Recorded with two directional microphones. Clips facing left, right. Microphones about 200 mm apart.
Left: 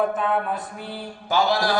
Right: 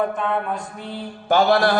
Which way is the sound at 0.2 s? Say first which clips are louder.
Even; 5° left (ahead or behind).